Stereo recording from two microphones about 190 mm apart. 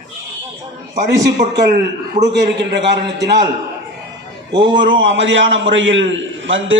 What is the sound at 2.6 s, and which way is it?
Speech, 65° right (ahead or behind).